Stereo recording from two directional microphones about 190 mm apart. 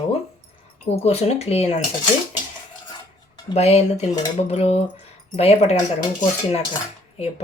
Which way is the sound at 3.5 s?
35° left (ahead or behind).